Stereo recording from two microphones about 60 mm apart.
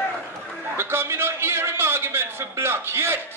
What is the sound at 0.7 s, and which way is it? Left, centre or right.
A man's voice, right.